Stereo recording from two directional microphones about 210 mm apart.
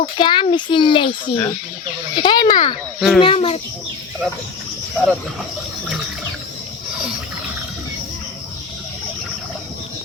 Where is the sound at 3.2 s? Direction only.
25° left (ahead or behind).